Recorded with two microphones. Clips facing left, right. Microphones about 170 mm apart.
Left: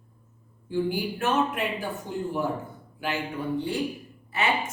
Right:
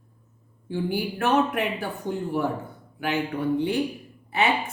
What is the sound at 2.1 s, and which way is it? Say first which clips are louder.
Speech: right 6 dB; 55° right (ahead or behind).